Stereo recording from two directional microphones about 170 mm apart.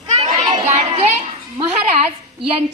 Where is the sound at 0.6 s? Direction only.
40° right (ahead or behind).